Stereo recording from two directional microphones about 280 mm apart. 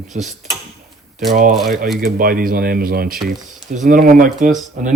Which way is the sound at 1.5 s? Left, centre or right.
Centre.